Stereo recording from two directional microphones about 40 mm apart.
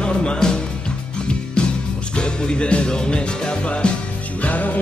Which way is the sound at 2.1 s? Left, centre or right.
Left.